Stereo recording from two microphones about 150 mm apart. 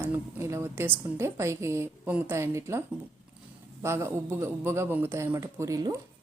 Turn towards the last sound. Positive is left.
turn(degrees=-25)  # may be behind; listen again after turning